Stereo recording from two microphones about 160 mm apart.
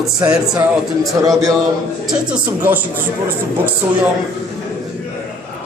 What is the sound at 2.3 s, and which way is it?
Speech, 10° right (ahead or behind).